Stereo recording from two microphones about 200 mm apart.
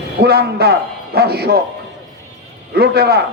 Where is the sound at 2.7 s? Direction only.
50° right (ahead or behind).